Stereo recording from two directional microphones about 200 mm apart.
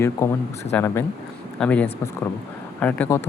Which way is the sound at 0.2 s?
15° left (ahead or behind).